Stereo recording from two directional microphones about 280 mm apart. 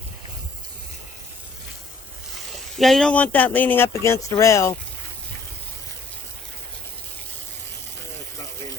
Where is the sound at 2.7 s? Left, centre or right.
Centre.